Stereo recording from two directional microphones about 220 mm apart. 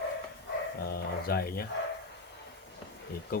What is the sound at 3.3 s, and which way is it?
Speech, 40° left (ahead or behind).